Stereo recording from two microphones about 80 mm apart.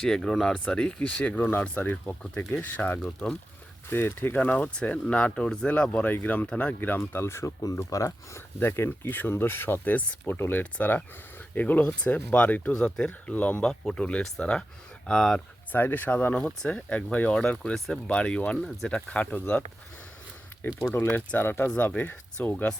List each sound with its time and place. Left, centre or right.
0.0 s speech: centre
6.7 s speech: left
8.5 s speech: left; by 15.4 s centre
15.7 s speech: left
17.7 s speech: centre
18.1 s speech: centre
20.8 s speech: left